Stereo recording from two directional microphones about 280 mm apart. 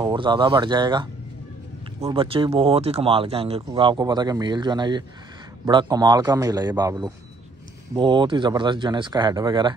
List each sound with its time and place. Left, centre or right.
0.0 s speech: centre
2.0 s speech: centre